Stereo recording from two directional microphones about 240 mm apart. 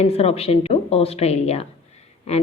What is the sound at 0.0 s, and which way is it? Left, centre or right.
Speech, left.